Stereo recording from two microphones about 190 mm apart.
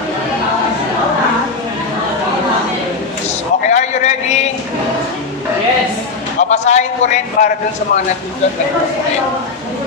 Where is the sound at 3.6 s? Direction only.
40° left (ahead or behind).